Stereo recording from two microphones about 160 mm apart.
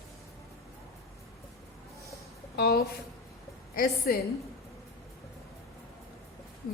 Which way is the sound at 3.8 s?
70° left (ahead or behind).